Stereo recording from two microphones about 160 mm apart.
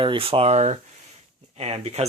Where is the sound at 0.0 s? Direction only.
35° right (ahead or behind).